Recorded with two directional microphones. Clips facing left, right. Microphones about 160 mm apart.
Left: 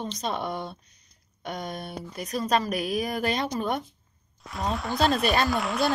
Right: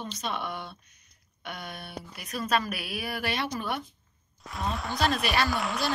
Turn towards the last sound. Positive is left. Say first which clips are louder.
# left 3 dB
turn(degrees=0)  # may be behind; listen again after turning